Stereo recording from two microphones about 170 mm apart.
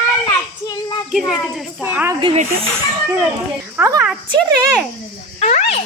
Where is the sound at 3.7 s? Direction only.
15° right (ahead or behind).